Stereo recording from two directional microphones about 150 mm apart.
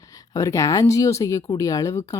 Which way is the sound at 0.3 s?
20° left (ahead or behind).